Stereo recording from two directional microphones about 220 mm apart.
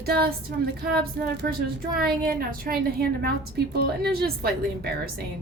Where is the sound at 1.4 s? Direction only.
45° right (ahead or behind).